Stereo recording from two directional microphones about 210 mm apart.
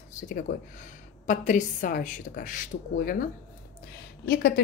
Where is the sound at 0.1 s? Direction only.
40° left (ahead or behind).